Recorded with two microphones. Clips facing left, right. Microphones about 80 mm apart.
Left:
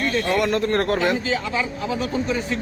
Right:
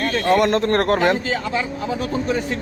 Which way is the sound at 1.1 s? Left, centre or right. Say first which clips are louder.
Right 1 dB; right.